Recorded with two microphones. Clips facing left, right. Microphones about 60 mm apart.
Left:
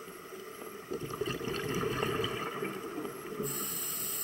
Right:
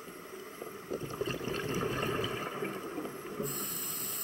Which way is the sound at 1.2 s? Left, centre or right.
Right.